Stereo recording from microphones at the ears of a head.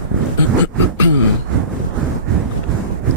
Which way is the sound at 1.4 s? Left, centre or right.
Right.